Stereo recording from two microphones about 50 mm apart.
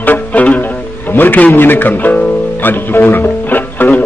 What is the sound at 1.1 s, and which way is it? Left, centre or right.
A man's voice, left.